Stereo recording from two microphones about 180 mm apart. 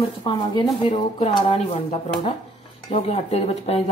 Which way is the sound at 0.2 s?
25° left (ahead or behind).